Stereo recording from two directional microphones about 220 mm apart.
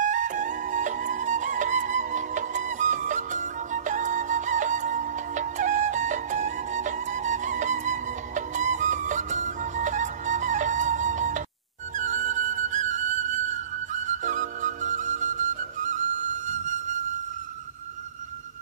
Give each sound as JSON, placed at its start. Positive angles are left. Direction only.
{"t": 0.0, "sound": "music", "side_deg": -35}
{"t": 12.0, "sound": "flute", "side_deg": -35}